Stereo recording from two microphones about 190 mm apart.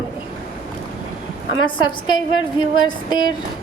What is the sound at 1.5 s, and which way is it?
A woman's voice, 25° left (ahead or behind).